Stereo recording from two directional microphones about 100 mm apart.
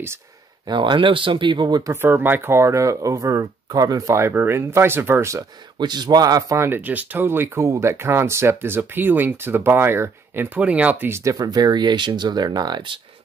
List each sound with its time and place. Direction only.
0.7 s speech: 55° right (ahead or behind)
1.8 s a man's voice: 35° right (ahead or behind)
2.0 s speech: 20° right (ahead or behind)
5.8 s a man's voice: 45° right (ahead or behind)
6.6 s speech: 20° right (ahead or behind)
11.2 s speech: 40° right (ahead or behind)